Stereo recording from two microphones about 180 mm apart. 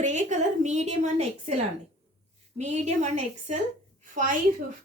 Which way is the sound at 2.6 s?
40° right (ahead or behind).